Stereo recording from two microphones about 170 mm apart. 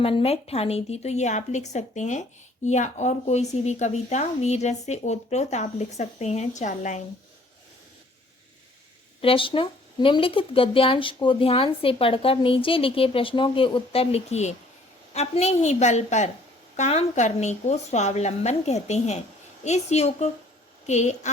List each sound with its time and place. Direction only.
0.0 s speech: 35° left (ahead or behind)
9.2 s a woman's voice: 30° left (ahead or behind)